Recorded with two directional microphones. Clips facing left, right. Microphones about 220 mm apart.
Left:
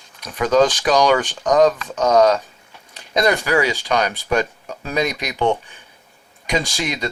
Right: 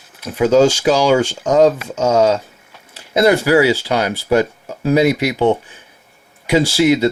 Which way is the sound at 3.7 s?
15° left (ahead or behind).